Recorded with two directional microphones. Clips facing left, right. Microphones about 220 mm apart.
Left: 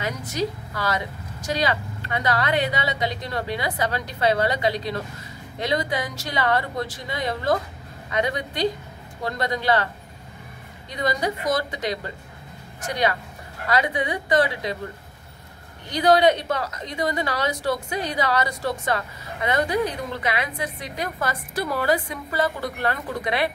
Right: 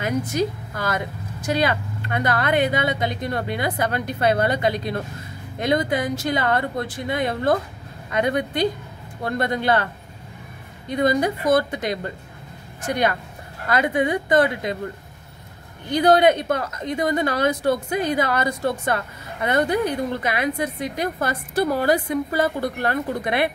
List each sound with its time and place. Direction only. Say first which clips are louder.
0.0 s a woman's voice: right 4 dB; 50° right (ahead or behind)
10.9 s a woman's voice: right 5 dB; 55° right (ahead or behind)
13.7 s a woman's voice: right 3 dB; 50° right (ahead or behind)
15.9 s a woman's voice: right 2 dB; 50° right (ahead or behind)